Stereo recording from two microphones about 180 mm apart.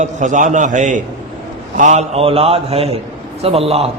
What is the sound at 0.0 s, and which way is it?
A man's voice, 45° right (ahead or behind).